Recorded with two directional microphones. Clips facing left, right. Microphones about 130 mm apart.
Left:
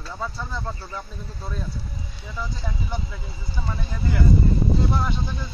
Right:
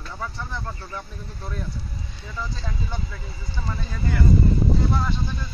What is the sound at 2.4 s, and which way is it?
Speech, 20° left (ahead or behind).